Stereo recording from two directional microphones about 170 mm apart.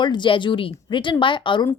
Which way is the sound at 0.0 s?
25° left (ahead or behind).